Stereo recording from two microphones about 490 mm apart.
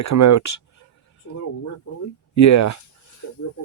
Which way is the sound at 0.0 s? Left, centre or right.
Left.